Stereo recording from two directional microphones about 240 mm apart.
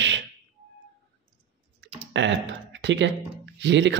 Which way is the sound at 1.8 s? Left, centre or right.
Right.